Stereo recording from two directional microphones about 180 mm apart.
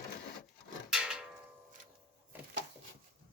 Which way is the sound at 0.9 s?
5° right (ahead or behind).